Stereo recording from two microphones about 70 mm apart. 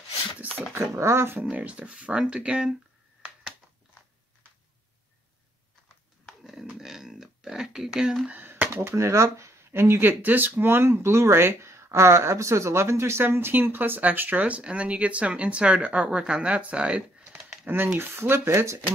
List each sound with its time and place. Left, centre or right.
0.7 s speech: right
1.4 s speech: right
6.2 s a sound: centre
8.3 s a sound: right
8.9 s speech: right; by 17.4 s centre
17.9 s speech: right